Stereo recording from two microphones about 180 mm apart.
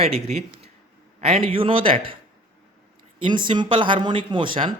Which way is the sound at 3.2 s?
25° right (ahead or behind).